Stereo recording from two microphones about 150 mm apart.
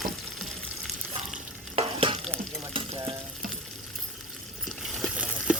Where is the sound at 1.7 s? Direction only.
40° right (ahead or behind).